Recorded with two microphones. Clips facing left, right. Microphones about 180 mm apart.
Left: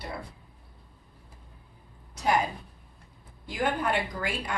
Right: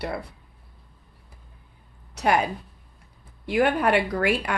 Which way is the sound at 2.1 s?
70° right (ahead or behind).